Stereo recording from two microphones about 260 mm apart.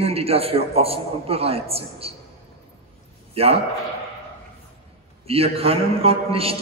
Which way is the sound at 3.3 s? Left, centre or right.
Right.